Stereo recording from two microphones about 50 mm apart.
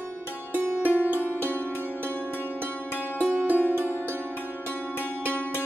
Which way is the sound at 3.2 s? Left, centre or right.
Right.